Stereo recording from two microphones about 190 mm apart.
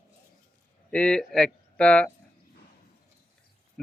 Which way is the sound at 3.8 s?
Centre (ahead or behind).